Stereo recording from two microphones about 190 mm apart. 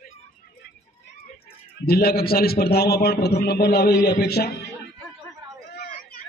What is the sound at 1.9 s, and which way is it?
A man's voice, 55° left (ahead or behind).